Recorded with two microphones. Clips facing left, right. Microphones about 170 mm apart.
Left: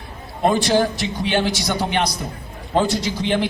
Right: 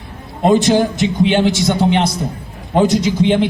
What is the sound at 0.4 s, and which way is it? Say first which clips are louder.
A man's voice: right 5 dB; 20° right (ahead or behind).